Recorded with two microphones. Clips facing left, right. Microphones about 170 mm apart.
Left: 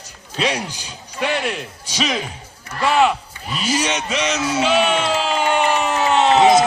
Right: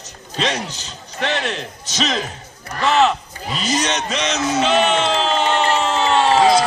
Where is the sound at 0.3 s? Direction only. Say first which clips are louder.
Left 1 dB; 10° left (ahead or behind).